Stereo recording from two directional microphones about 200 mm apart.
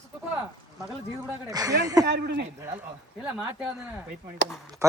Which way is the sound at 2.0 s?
55° right (ahead or behind).